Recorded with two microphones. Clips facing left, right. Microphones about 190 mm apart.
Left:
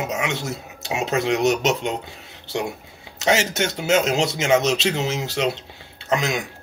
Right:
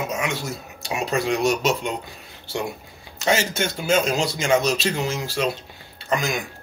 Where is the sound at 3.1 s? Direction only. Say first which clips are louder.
Left 1 dB; 20° left (ahead or behind).